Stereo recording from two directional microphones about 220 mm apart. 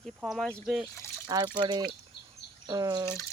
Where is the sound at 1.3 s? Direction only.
20° right (ahead or behind).